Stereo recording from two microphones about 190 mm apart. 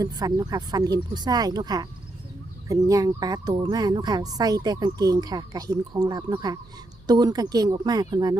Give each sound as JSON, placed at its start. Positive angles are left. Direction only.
{"t": 0.0, "sound": "speech", "side_deg": -20}